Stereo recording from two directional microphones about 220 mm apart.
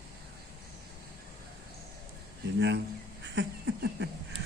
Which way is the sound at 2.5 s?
55° right (ahead or behind).